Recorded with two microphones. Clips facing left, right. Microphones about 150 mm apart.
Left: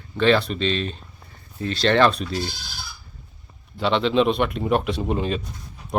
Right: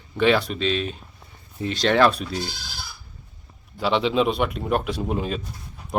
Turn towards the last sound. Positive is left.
turn(degrees=0)  # may be behind; listen again after turning